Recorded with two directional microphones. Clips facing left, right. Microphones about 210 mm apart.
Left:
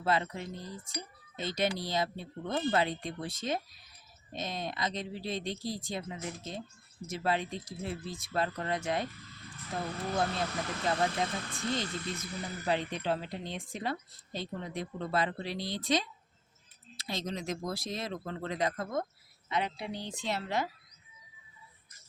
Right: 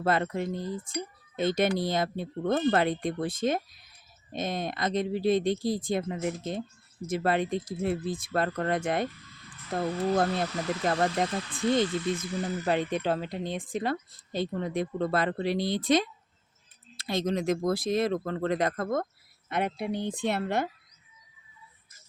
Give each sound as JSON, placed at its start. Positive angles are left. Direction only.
{"t": 0.0, "sound": "speech", "side_deg": -55}